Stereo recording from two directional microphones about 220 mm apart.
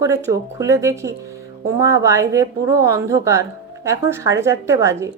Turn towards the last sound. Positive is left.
turn(degrees=-15)  # may be behind; listen again after turning